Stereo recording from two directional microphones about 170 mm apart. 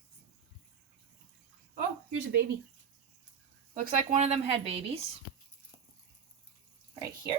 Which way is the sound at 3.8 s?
55° right (ahead or behind).